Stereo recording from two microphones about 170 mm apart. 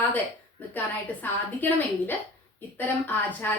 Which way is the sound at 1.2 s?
10° left (ahead or behind).